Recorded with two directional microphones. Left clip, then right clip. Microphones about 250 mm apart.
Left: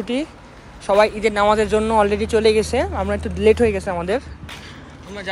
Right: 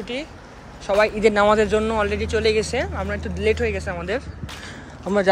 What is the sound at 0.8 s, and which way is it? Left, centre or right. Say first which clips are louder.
A man's voice: left 2 dB; centre.